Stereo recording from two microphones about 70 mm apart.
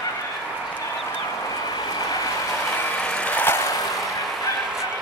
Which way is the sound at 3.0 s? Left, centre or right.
Centre.